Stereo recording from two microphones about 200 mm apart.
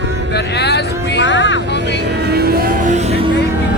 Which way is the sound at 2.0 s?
55° right (ahead or behind).